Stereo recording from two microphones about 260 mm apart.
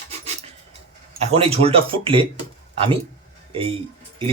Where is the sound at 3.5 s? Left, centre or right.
Right.